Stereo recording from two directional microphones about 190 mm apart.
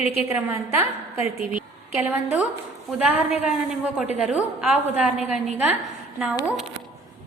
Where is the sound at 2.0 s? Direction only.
10° right (ahead or behind).